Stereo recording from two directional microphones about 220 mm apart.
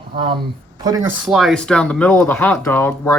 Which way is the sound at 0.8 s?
15° right (ahead or behind).